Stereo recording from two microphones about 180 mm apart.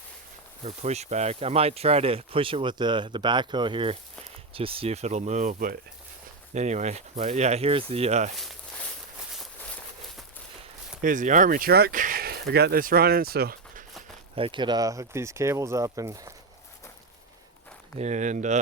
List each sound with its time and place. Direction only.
0.6 s speech: 40° right (ahead or behind)
8.4 s a sound: centre (ahead or behind)
11.0 s speech: 45° right (ahead or behind)
14.3 s speech: 30° right (ahead or behind)
17.9 s speech: 40° right (ahead or behind)